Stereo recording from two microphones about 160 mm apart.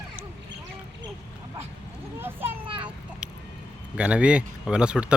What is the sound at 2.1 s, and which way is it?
Children playing, 15° right (ahead or behind).